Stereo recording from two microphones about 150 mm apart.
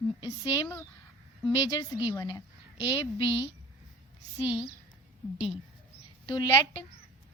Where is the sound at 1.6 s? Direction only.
25° left (ahead or behind).